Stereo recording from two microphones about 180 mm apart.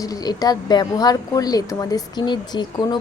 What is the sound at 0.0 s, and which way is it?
A woman's voice, 20° left (ahead or behind).